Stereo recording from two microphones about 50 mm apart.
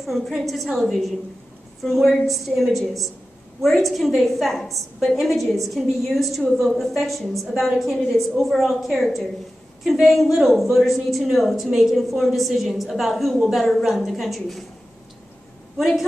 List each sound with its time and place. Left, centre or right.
0.0 s a woman's voice: centre